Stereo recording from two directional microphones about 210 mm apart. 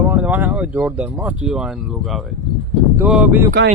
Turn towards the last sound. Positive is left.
turn(degrees=-55)  # may be behind; listen again after turning